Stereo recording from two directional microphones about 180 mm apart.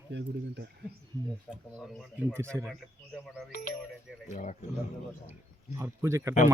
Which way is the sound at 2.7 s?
Centre (ahead or behind).